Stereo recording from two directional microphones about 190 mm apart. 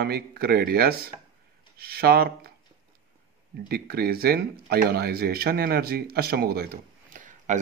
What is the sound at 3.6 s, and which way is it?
Speech, 55° right (ahead or behind).